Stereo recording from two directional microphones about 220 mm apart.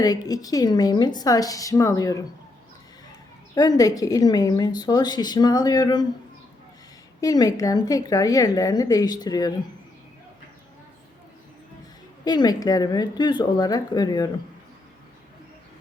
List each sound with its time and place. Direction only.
0.0 s a woman's voice: 15° left (ahead or behind)
7.2 s a woman's voice: 15° left (ahead or behind)
12.2 s a woman's voice: 20° left (ahead or behind)